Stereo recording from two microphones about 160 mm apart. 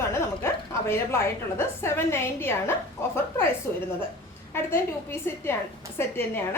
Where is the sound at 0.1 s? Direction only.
15° left (ahead or behind).